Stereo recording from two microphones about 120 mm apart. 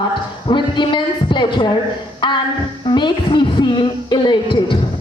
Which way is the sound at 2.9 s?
40° left (ahead or behind).